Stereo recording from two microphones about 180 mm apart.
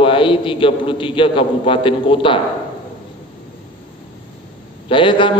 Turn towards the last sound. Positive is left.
turn(degrees=30)  # may be behind; listen again after turning